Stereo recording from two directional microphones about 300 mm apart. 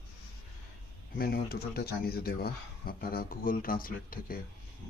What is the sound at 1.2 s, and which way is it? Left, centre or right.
Speech, left.